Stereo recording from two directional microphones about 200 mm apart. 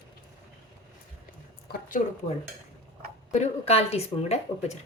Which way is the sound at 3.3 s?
30° left (ahead or behind).